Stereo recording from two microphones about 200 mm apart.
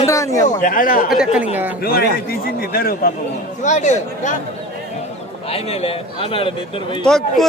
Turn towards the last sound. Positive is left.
turn(degrees=0)  # may be behind; listen again after turning